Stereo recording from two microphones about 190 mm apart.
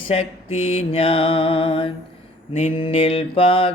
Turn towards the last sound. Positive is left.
turn(degrees=30)  # may be behind; listen again after turning